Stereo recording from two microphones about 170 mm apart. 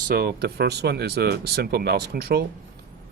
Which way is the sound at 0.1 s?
65° right (ahead or behind).